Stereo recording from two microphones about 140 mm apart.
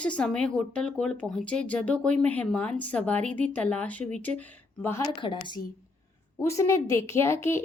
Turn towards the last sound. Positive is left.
turn(degrees=20)  # may be behind; listen again after turning